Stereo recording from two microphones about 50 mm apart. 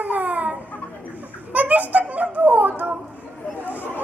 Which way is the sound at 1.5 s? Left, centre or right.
Right.